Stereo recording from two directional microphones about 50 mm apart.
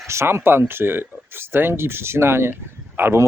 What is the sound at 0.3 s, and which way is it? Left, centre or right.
Speech, right.